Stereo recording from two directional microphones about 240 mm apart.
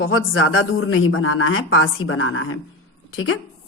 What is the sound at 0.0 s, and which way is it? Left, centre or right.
A woman's voice, left.